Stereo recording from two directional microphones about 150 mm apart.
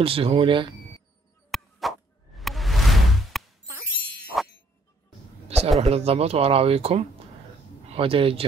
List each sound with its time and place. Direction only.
0.0 s speech: 40° right (ahead or behind)
1.5 s plop: centre (ahead or behind)
4.3 s clang: centre (ahead or behind)
5.8 s speech: 40° right (ahead or behind)